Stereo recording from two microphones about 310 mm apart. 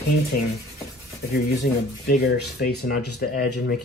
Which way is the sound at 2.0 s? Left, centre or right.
Left.